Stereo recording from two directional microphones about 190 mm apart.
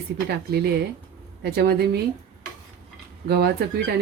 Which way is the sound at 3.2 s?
60° right (ahead or behind).